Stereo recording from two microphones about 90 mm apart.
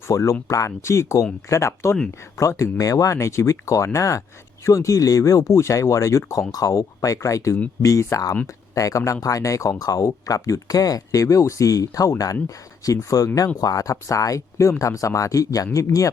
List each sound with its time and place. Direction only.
0.1 s speech: 35° left (ahead or behind)